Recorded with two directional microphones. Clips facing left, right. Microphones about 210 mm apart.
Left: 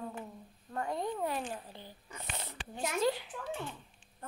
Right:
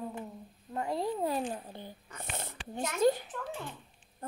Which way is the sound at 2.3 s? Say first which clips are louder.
Right 5 dB; 50° right (ahead or behind).